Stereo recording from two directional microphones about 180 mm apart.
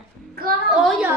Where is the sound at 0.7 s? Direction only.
5° right (ahead or behind).